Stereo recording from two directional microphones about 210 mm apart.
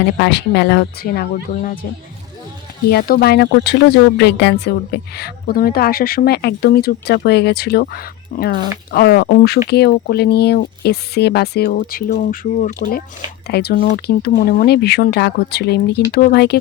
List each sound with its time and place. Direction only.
0.2 s a woman's voice: 55° left (ahead or behind)
2.9 s a woman's voice: 45° left (ahead or behind)
13.5 s a woman's voice: 50° left (ahead or behind)